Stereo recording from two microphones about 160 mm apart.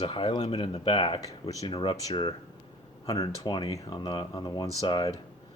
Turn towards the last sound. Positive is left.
turn(degrees=30)  # may be behind; listen again after turning